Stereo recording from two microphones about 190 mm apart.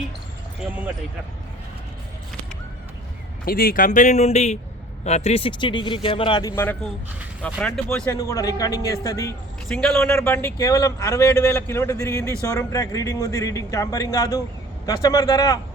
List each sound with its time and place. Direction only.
3.4 s speech: 50° left (ahead or behind); by 6.5 s 25° left (ahead or behind)
6.6 s a man's voice: 10° left (ahead or behind)
8.1 s a man's voice: 15° left (ahead or behind)
9.6 s a man's voice: 5° left (ahead or behind)